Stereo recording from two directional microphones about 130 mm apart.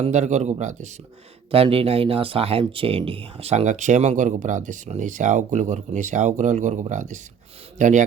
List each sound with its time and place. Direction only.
0.0 s speech: 65° right (ahead or behind)
1.5 s speech: 45° right (ahead or behind); by 8.0 s 70° right (ahead or behind)